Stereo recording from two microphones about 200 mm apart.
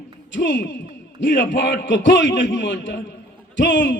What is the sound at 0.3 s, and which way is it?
A man's voice, 60° left (ahead or behind).